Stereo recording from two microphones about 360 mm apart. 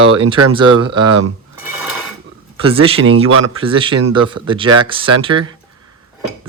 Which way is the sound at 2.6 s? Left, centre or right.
Centre.